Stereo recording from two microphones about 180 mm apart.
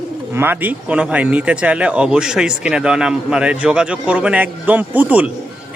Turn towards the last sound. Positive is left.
turn(degrees=-10)  # may be behind; listen again after turning